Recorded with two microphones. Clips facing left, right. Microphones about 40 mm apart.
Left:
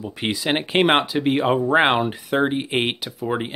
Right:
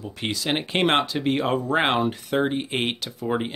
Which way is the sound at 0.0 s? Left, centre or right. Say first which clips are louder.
Left 4 dB; centre.